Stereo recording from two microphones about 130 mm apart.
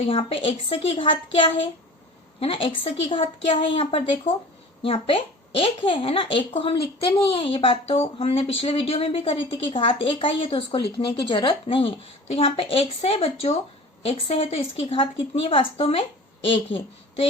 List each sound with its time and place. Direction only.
0.0 s speech: 45° left (ahead or behind)